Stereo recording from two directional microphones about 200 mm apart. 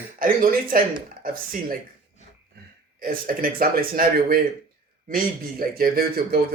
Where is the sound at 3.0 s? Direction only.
45° right (ahead or behind).